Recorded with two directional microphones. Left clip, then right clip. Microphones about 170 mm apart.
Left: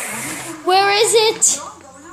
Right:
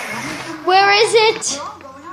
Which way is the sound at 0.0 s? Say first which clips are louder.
Right 2 dB; 20° left (ahead or behind).